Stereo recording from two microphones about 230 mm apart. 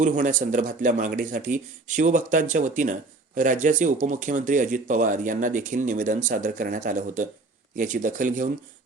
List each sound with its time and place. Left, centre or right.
0.0 s speech: right